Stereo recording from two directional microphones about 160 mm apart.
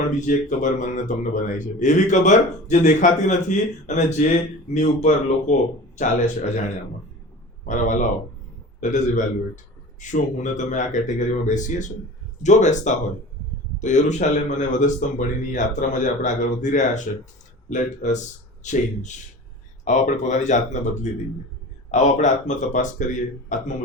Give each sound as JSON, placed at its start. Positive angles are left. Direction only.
{"t": 0.0, "sound": "speech", "side_deg": 50}
{"t": 7.7, "sound": "speech", "side_deg": 50}